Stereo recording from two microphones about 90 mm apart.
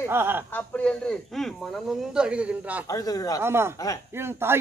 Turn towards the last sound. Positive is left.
turn(degrees=-25)  # may be behind; listen again after turning